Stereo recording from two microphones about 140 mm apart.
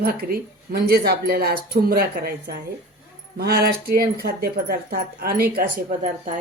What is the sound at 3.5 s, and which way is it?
Speech, 90° right.